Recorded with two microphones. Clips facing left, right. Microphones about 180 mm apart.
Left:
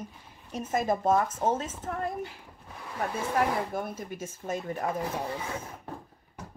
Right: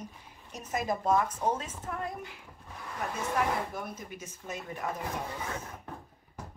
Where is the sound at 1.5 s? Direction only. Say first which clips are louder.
Left 4 dB; 45° left (ahead or behind).